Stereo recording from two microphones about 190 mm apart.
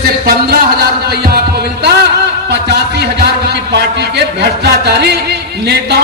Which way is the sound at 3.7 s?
60° right (ahead or behind).